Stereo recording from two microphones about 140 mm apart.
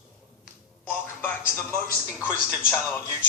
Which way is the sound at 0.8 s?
15° left (ahead or behind).